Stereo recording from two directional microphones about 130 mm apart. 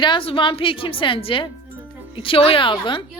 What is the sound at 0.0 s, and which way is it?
A woman's voice, 40° left (ahead or behind).